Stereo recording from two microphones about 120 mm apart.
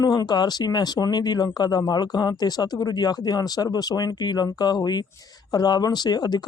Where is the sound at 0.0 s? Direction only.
30° left (ahead or behind).